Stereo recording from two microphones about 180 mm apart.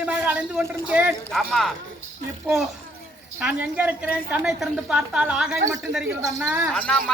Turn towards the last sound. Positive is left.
turn(degrees=5)  # may be behind; listen again after turning